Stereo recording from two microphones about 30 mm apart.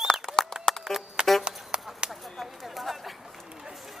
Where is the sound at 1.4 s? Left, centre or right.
Right.